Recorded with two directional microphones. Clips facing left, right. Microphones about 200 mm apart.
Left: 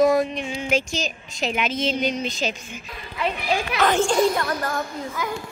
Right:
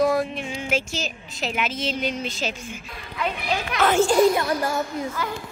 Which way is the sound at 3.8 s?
5° right (ahead or behind).